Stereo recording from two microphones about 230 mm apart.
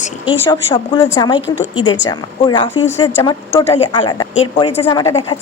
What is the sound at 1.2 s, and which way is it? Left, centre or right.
A woman's voice, centre.